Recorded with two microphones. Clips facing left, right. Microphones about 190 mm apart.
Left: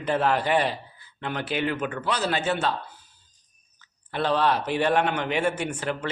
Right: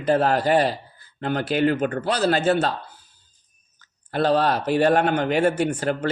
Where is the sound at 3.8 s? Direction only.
40° right (ahead or behind).